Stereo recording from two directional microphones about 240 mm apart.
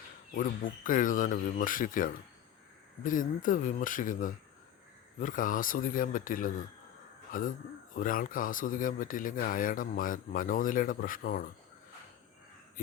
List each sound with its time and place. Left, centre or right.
0.3 s speech: left